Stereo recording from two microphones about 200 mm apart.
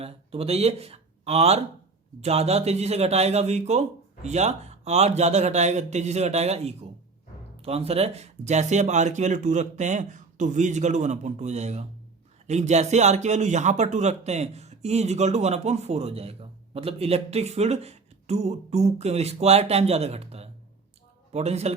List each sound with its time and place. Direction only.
0.0 s speech: 30° right (ahead or behind)